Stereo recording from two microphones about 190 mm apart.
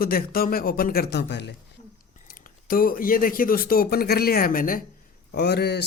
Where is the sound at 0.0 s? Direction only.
50° left (ahead or behind).